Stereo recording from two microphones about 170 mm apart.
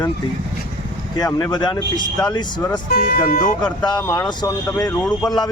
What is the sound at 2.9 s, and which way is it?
Speech, 60° left (ahead or behind).